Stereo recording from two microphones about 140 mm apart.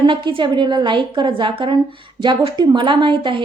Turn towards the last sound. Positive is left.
turn(degrees=-35)  # may be behind; listen again after turning